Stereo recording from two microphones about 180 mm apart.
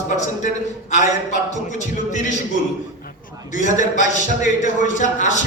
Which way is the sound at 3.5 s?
45° left (ahead or behind).